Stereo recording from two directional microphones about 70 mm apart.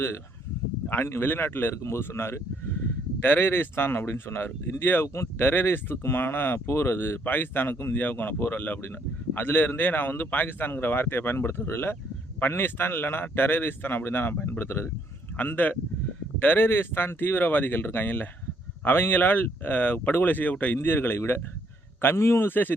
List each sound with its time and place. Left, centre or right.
0.9 s a man's voice: left